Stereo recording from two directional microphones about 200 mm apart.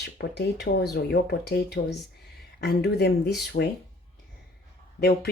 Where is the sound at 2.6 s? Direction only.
55° left (ahead or behind).